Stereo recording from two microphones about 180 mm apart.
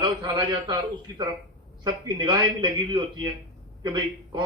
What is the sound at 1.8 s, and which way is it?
A man's voice, 25° right (ahead or behind).